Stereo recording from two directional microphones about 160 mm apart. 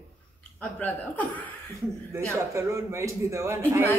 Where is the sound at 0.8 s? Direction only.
10° left (ahead or behind).